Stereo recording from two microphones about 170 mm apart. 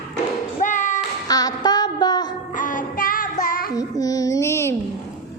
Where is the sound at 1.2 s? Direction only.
20° left (ahead or behind).